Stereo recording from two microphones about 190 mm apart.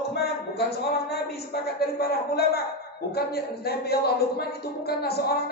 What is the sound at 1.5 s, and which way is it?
Speech, 55° left (ahead or behind).